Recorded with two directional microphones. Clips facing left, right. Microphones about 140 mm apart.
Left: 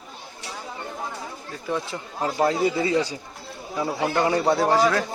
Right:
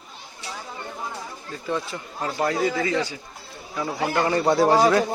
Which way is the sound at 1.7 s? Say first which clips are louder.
Even; 20° left (ahead or behind).